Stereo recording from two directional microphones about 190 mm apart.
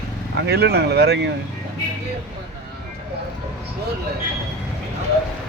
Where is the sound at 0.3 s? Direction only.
60° right (ahead or behind).